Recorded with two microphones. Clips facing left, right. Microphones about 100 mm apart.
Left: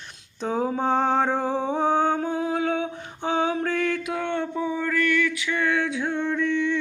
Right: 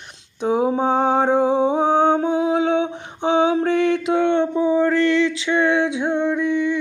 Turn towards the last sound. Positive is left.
turn(degrees=-15)  # may be behind; listen again after turning